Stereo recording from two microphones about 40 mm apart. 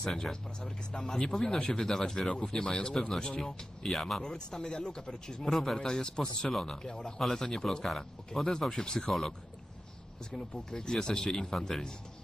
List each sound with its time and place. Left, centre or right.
0.2 s speech: centre
4.5 s speech: centre
10.3 s speech: centre